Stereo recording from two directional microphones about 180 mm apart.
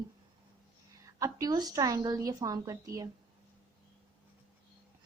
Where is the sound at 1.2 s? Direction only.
20° right (ahead or behind).